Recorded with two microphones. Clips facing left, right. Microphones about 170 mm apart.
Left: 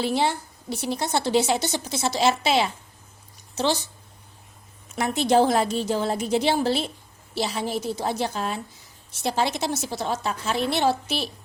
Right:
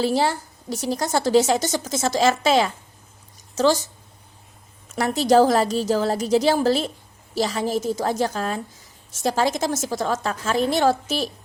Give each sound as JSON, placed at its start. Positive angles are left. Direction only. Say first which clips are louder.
{"t": 0.0, "sound": "a woman's voice", "louder": "right 3 dB", "side_deg": -40}
{"t": 4.9, "sound": "a woman's voice", "louder": "right 3 dB", "side_deg": -40}